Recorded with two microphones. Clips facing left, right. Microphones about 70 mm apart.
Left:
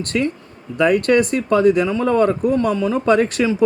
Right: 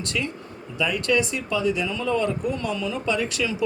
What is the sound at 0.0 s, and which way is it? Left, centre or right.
Speech, left.